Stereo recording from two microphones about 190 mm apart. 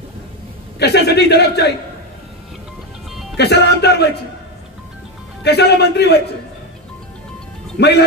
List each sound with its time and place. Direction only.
0.7 s a man's voice: 60° left (ahead or behind)
3.3 s a man's voice: 60° left (ahead or behind)
5.4 s a man's voice: 60° left (ahead or behind)
7.8 s a man's voice: 65° left (ahead or behind)